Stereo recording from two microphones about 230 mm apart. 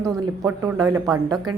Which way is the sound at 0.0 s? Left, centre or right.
Centre.